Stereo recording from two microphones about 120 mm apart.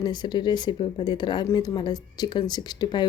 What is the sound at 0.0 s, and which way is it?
Speech, 35° left (ahead or behind).